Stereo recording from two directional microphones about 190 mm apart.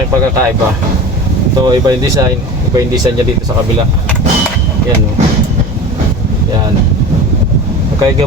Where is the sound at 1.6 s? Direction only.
20° right (ahead or behind).